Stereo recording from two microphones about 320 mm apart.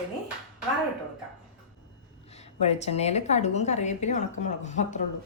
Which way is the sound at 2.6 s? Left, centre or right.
Centre.